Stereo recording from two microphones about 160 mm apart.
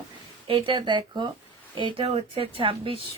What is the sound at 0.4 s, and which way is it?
A woman's voice, 30° right (ahead or behind).